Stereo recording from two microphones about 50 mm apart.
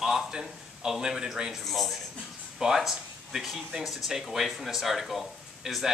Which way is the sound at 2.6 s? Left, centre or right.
Centre.